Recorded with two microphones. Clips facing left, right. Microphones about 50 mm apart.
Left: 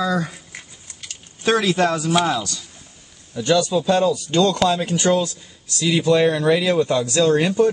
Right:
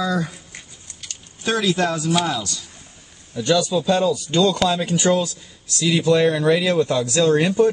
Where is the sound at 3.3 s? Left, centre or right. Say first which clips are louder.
Left 1 dB; centre.